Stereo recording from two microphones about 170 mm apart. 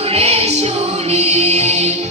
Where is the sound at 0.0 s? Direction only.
35° right (ahead or behind).